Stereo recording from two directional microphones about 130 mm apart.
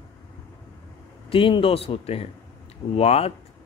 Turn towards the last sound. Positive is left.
turn(degrees=50)  # may be behind; listen again after turning